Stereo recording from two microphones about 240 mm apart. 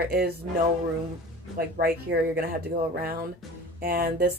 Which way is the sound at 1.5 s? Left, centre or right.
Right.